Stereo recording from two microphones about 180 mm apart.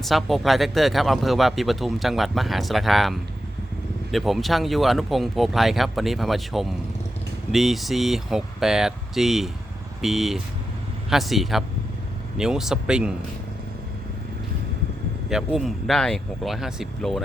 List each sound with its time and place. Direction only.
0.0 s speech: centre (ahead or behind)
15.3 s speech: 5° right (ahead or behind)